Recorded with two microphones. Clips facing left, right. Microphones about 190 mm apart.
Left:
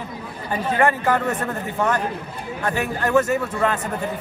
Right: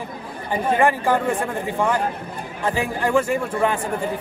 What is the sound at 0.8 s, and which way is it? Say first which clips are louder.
A man's voice: left 1 dB; 10° right (ahead or behind).